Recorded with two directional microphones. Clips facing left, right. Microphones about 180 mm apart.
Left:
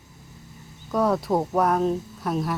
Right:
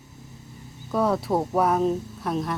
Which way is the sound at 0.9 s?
Centre (ahead or behind).